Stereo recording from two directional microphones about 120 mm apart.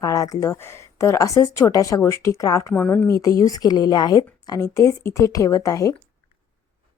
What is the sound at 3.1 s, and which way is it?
Speech, 30° left (ahead or behind).